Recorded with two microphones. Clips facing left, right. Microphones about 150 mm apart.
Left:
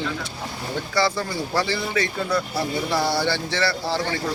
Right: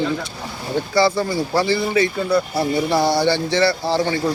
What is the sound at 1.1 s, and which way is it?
Speech, 35° right (ahead or behind).